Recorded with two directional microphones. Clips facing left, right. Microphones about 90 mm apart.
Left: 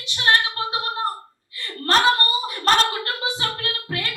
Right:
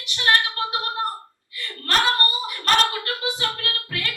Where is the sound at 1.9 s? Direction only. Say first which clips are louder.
Left 3 dB; 30° left (ahead or behind).